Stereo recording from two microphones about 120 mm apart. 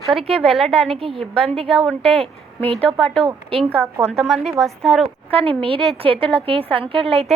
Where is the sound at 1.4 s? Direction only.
55° right (ahead or behind).